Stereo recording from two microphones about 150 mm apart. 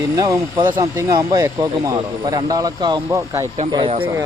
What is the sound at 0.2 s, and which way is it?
Speech, 25° right (ahead or behind).